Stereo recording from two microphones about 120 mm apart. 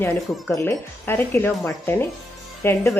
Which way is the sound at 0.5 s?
20° left (ahead or behind).